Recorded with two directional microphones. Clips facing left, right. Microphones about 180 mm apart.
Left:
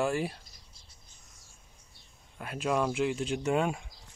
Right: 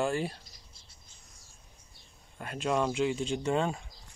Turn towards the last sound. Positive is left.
turn(degrees=10)  # may be behind; listen again after turning